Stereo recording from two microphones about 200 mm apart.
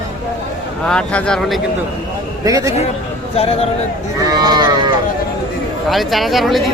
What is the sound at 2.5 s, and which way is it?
Speech, 15° right (ahead or behind).